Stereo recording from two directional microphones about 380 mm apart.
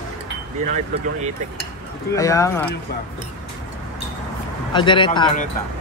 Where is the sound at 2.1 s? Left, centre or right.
Centre.